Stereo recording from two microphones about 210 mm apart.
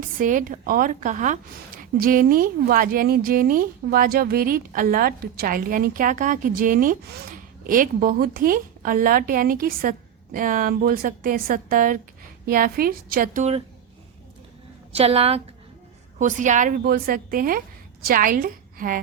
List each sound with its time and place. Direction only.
0.2 s a woman's voice: 40° right (ahead or behind)
14.9 s a woman's voice: 30° right (ahead or behind)